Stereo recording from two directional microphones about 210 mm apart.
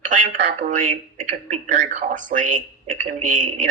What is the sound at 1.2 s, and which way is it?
Speech, 35° right (ahead or behind).